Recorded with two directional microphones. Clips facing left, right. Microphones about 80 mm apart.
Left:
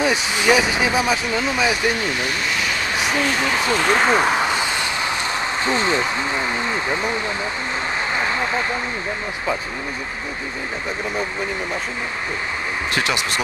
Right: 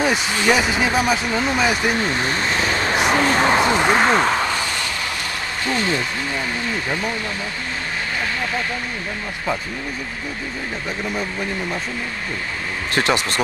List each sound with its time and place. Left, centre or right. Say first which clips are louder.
0.5 s speech: left 1 dB; centre
2.2 s speech: right 2 dB; right
3.6 s speech: right 2 dB; right
3.9 s speech: left 2 dB; centre
4.2 s a sound: left 1 dB; centre
5.7 s speech: left 1 dB; left
8.2 s a sound: left 2 dB; left
12.9 s speech: right 4 dB; right